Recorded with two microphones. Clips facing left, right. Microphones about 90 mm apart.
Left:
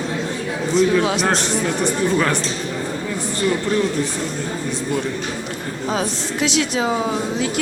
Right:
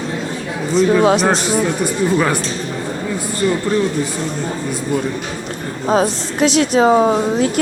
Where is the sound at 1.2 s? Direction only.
Centre (ahead or behind).